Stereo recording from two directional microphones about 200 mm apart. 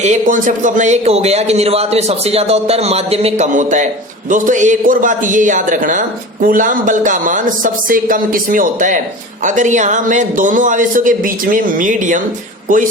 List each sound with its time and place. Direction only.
0.0 s a man's voice: 40° right (ahead or behind)